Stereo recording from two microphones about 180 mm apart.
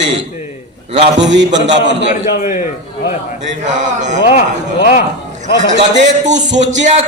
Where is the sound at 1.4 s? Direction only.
80° right.